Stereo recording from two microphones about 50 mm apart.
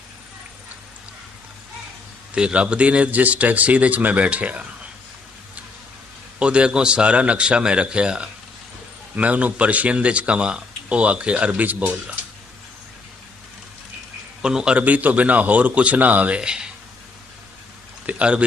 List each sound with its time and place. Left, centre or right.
2.3 s speech: right
6.4 s speech: right
14.4 s a man's voice: centre
14.8 s speech: right
16.4 s a man's voice: centre
18.0 s speech: right